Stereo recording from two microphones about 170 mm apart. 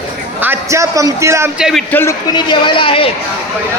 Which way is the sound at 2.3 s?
25° left (ahead or behind).